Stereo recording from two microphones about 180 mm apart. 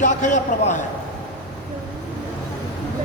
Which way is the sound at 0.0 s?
45° left (ahead or behind).